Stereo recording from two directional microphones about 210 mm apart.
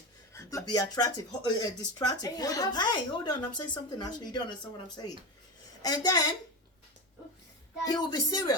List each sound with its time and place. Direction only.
0.3 s speech: 15° left (ahead or behind)
7.9 s speech: 15° left (ahead or behind)